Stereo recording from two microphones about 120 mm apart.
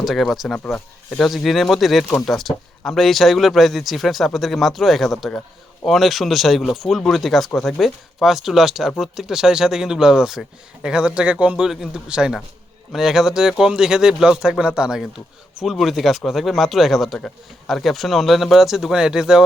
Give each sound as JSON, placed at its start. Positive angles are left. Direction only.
{"t": 0.0, "sound": "a man's voice", "side_deg": 0}